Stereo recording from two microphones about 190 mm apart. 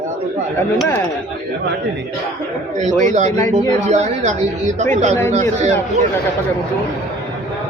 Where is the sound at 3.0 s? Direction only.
40° right (ahead or behind).